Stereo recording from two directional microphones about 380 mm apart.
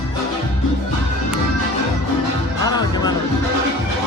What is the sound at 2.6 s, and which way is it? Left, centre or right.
Music, centre.